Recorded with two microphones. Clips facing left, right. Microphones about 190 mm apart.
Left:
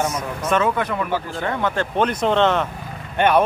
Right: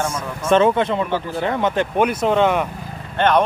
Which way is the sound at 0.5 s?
30° right (ahead or behind).